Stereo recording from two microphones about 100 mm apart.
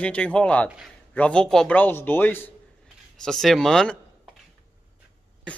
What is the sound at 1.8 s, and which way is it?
Speech, 20° left (ahead or behind).